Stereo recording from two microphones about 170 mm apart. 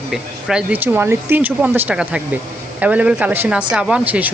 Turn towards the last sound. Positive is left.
turn(degrees=-10)  # may be behind; listen again after turning